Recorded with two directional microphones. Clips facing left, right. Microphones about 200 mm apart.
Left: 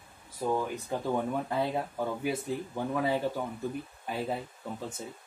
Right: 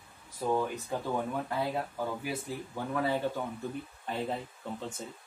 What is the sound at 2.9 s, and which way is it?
Speech, 10° left (ahead or behind).